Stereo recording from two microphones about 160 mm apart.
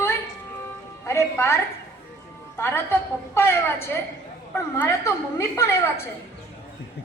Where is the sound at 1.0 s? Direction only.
15° left (ahead or behind).